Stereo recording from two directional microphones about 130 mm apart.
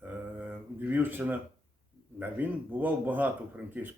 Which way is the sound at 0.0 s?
15° right (ahead or behind).